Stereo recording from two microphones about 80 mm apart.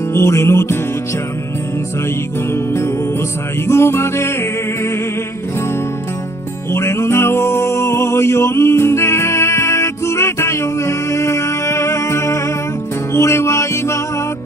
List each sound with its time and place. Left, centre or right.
0.1 s music: left
3.6 s music: left
6.7 s music: left